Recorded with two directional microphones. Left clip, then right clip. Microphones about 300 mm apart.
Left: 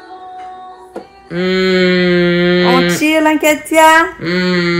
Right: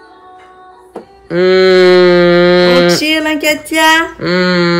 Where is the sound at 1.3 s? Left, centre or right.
Right.